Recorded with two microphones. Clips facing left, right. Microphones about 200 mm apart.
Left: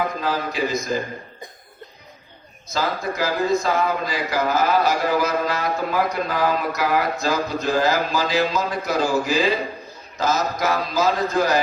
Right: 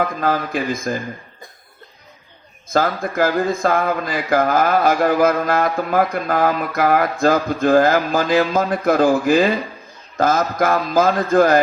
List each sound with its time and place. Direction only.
0.2 s speech: 55° right (ahead or behind)
2.7 s speech: 55° right (ahead or behind)